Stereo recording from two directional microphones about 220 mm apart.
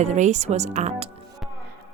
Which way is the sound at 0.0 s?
30° right (ahead or behind).